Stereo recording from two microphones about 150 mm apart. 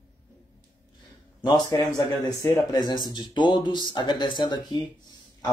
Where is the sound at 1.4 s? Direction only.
30° left (ahead or behind).